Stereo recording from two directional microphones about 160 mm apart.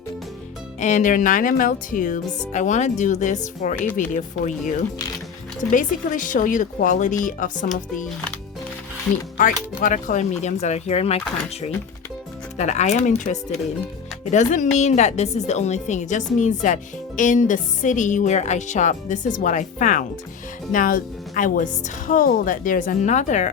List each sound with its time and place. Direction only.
0.8 s a woman's voice: 50° left (ahead or behind)
5.7 s a woman's voice: 55° left (ahead or behind)
9.4 s a woman's voice: 55° left (ahead or behind)
12.5 s a woman's voice: 45° left (ahead or behind)